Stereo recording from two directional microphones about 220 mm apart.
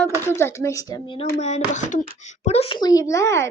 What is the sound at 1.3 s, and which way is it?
Speech, 30° left (ahead or behind).